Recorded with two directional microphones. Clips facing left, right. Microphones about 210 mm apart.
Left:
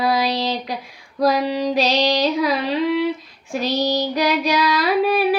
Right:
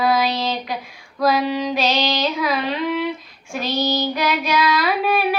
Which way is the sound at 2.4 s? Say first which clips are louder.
Left 2 dB; 35° left (ahead or behind).